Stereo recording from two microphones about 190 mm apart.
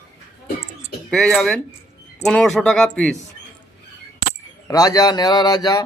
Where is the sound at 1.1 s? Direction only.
Centre (ahead or behind).